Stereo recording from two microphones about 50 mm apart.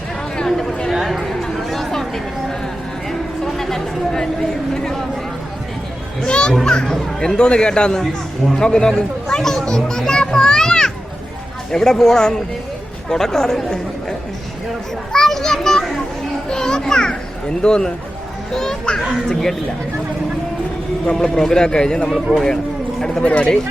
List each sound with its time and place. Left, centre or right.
0.3 s a sound: centre
0.9 s a sound: centre
1.2 s chatter: centre
3.1 s speech: centre
6.2 s children playing: centre
6.7 s speech: centre
15.1 s children playing: centre
17.6 s speech: centre
21.1 s speech: centre
23.2 s speech: left